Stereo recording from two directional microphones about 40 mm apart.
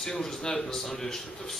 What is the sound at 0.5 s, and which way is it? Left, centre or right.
Speech, centre.